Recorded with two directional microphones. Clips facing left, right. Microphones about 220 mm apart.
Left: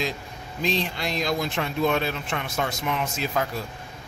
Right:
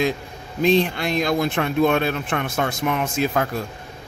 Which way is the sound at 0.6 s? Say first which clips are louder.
Right 9 dB; 55° right (ahead or behind).